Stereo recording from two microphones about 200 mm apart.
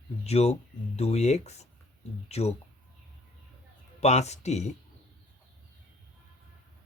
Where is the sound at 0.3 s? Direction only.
30° left (ahead or behind).